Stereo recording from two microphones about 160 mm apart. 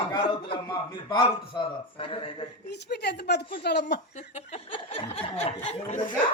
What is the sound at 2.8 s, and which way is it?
A woman's voice, 90° left.